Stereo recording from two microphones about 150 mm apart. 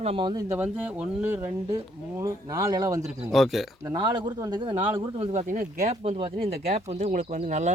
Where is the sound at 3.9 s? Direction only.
30° right (ahead or behind).